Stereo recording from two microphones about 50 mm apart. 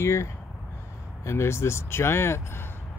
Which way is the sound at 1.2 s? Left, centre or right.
Left.